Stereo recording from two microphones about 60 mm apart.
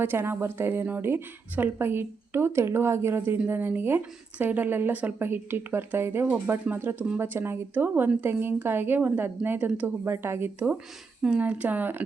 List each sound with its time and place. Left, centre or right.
0.0 s a woman's voice: right
3.2 s a woman's voice: right
11.3 s speech: right